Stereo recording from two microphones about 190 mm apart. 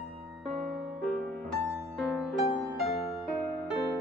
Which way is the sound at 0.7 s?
Centre (ahead or behind).